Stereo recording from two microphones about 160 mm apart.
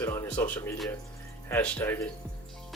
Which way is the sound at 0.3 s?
10° left (ahead or behind).